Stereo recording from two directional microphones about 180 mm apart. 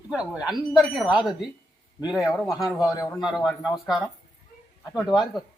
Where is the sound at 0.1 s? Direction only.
5° right (ahead or behind).